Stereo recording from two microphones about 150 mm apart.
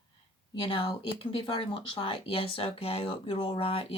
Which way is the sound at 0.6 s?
35° left (ahead or behind).